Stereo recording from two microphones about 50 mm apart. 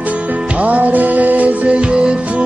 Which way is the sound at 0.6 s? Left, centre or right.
Right.